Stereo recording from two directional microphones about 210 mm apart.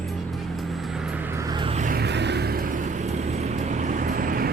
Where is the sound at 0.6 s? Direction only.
Centre (ahead or behind).